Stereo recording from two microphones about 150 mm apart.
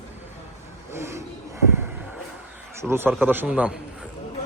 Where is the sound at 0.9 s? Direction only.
15° right (ahead or behind).